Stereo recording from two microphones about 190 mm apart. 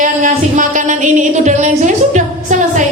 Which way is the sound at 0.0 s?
40° right (ahead or behind).